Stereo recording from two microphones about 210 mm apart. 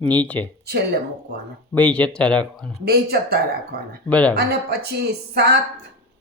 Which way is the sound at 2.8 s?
45° right (ahead or behind).